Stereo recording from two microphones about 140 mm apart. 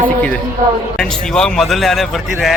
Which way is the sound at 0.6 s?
70° right (ahead or behind).